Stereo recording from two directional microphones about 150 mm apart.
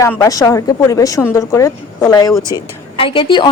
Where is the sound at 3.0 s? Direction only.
35° left (ahead or behind).